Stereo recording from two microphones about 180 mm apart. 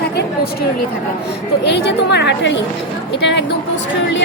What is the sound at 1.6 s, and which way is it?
A woman's voice, 70° left (ahead or behind).